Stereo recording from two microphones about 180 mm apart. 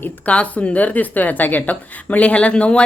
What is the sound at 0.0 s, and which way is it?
Speech, 5° left (ahead or behind).